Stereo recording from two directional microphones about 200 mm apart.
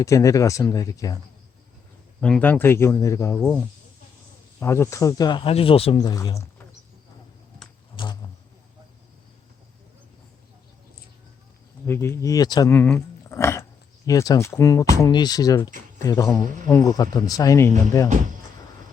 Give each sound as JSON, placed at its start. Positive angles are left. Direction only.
{"t": 0.0, "sound": "speech", "side_deg": 15}
{"t": 2.2, "sound": "speech", "side_deg": 5}
{"t": 4.6, "sound": "speech", "side_deg": 15}
{"t": 7.9, "sound": "a sound", "side_deg": 20}
{"t": 11.9, "sound": "speech", "side_deg": 15}
{"t": 12.7, "sound": "speech", "side_deg": 10}